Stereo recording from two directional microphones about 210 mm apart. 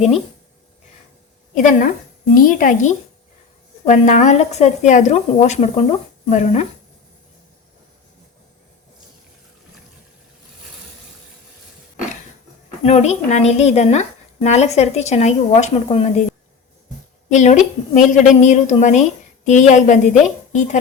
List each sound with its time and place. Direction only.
1.5 s a woman's voice: 40° left (ahead or behind)
12.8 s a woman's voice: 30° left (ahead or behind)
17.2 s a woman's voice: 35° left (ahead or behind)